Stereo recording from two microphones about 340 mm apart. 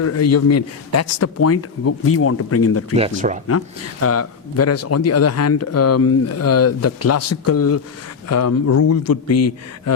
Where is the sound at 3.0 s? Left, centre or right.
Right.